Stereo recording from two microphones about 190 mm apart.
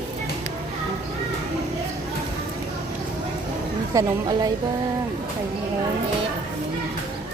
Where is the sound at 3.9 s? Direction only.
20° right (ahead or behind).